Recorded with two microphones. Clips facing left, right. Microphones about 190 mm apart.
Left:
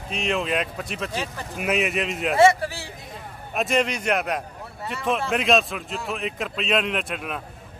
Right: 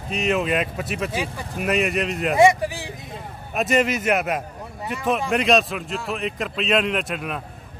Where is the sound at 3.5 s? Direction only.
Centre (ahead or behind).